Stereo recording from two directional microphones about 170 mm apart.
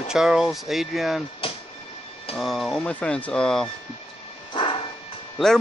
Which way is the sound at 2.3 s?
Centre (ahead or behind).